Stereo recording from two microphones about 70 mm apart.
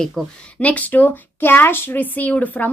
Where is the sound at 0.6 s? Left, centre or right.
Left.